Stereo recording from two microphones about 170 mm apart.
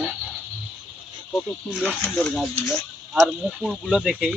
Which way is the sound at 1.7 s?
5° right (ahead or behind).